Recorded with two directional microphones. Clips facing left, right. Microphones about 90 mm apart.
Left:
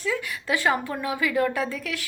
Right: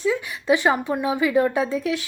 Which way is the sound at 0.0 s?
20° right (ahead or behind).